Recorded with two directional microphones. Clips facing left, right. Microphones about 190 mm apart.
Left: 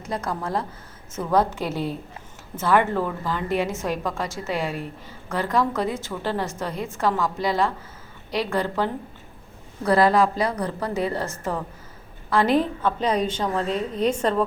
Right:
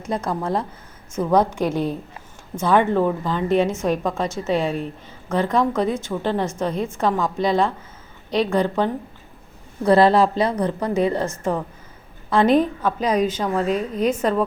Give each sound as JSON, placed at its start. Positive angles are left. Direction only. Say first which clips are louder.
{"t": 0.3, "sound": "a woman's voice", "louder": "right 2 dB", "side_deg": -20}